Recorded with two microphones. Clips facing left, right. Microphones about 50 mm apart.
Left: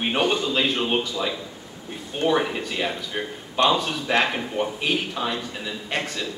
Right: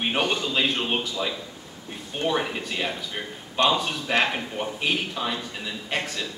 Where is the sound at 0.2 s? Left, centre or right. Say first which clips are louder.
Left 5 dB; left.